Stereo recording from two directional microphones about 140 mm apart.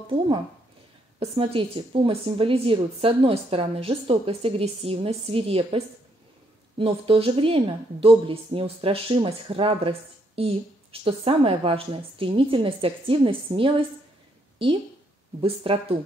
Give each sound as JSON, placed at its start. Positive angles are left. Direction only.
{"t": 1.4, "sound": "a woman's voice", "side_deg": -40}
{"t": 6.8, "sound": "a woman's voice", "side_deg": -40}
{"t": 15.4, "sound": "a woman's voice", "side_deg": -45}